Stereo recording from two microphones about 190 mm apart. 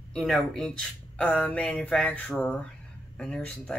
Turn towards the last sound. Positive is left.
turn(degrees=5)  # may be behind; listen again after turning